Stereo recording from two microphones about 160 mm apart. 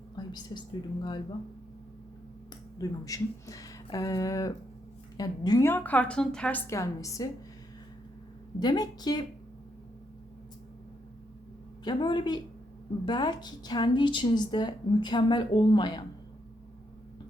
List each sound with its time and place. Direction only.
0.2 s a sound: 25° left (ahead or behind)
2.8 s a woman's voice: 20° left (ahead or behind)
5.6 s a woman's voice: 10° left (ahead or behind)
6.7 s a woman's voice: 20° left (ahead or behind)
8.5 s a woman's voice: 25° left (ahead or behind)
11.9 s a woman's voice: 30° left (ahead or behind)